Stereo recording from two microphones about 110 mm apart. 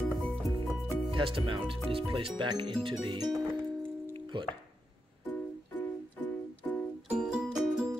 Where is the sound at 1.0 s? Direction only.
50° right (ahead or behind).